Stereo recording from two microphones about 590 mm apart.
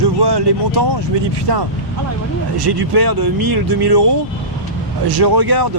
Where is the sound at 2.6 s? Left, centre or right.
Right.